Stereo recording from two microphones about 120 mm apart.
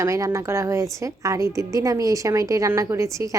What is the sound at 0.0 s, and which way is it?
A woman's voice, 25° right (ahead or behind).